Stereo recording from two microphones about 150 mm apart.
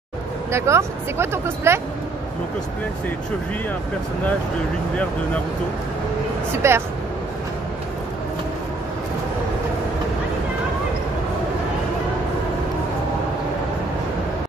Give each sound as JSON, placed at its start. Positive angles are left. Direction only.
{"t": 0.5, "sound": "speech", "side_deg": -20}
{"t": 6.6, "sound": "speech", "side_deg": -20}